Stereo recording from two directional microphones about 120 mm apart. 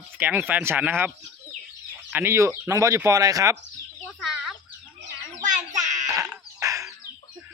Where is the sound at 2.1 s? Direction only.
20° right (ahead or behind).